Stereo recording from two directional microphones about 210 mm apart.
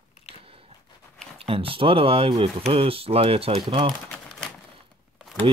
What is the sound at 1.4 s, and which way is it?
Speech, 25° right (ahead or behind).